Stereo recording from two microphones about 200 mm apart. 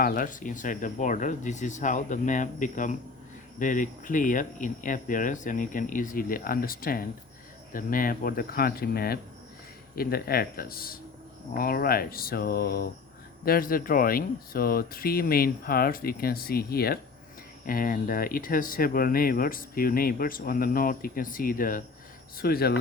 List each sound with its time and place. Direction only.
0.0 s speech: 45° left (ahead or behind)